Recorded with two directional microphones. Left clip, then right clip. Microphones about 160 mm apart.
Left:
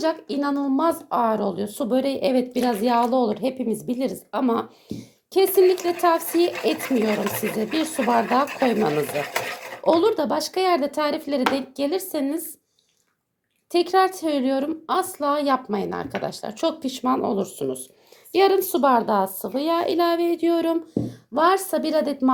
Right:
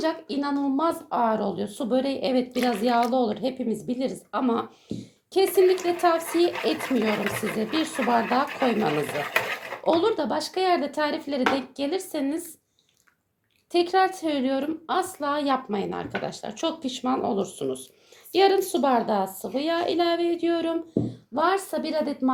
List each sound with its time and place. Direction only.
0.0 s a woman's voice: 30° left (ahead or behind)
13.7 s a woman's voice: 30° left (ahead or behind)